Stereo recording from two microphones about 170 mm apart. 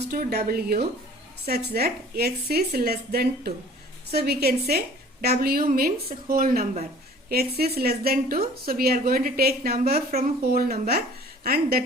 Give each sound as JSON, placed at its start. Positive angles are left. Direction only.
{"t": 0.1, "sound": "a woman's voice", "side_deg": -70}